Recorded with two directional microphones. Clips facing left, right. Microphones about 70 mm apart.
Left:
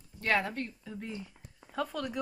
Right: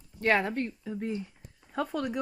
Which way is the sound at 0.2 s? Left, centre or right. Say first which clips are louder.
Right 4 dB; right.